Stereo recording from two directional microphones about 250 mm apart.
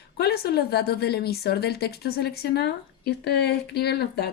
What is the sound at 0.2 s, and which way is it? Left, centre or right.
Speech, left.